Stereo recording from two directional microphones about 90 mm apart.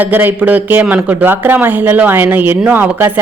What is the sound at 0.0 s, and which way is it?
Speech, 20° right (ahead or behind).